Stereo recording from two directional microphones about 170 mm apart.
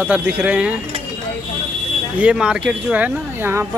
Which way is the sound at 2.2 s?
5° right (ahead or behind).